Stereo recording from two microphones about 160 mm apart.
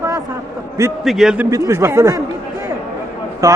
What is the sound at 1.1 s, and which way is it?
Speech, centre (ahead or behind).